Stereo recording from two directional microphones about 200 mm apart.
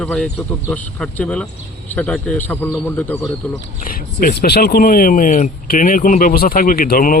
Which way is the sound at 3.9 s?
50° left (ahead or behind).